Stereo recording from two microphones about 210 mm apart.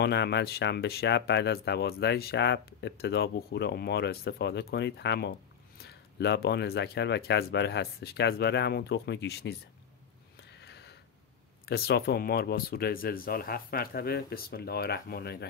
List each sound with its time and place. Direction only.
0.0 s speech: 55° left (ahead or behind)
10.6 s a sound: 55° left (ahead or behind)
11.6 s speech: 50° left (ahead or behind)